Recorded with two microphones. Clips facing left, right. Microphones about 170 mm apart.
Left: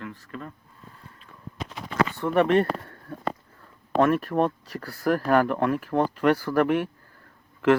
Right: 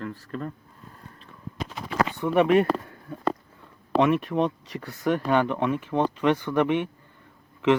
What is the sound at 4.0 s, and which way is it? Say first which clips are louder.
Speech: left 1 dB; centre (ahead or behind).